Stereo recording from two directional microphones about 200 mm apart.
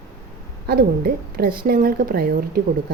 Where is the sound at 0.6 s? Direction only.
50° right (ahead or behind).